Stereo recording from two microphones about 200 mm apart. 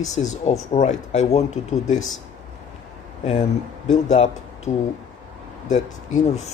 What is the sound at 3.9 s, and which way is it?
Speech, 35° left (ahead or behind).